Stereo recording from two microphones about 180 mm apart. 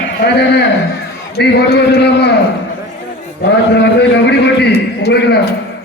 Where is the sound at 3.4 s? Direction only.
70° left (ahead or behind).